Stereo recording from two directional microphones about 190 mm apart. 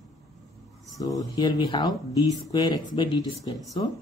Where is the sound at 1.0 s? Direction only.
20° left (ahead or behind).